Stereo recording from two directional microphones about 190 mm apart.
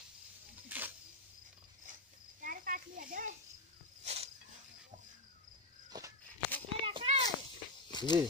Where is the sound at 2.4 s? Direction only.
45° right (ahead or behind).